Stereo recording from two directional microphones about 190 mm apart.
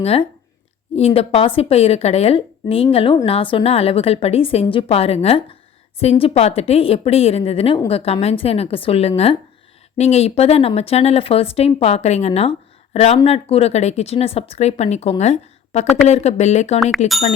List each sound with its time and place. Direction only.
0.0 s speech: 30° left (ahead or behind)